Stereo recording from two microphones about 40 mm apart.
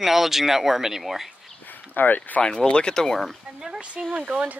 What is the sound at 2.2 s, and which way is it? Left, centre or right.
Speech, left.